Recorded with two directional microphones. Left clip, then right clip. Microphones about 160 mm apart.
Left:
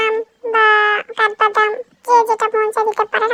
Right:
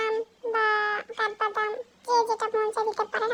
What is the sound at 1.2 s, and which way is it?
Wind instrument, 50° left (ahead or behind).